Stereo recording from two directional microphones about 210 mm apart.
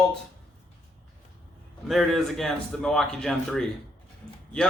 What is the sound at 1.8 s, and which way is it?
A man's voice, centre (ahead or behind).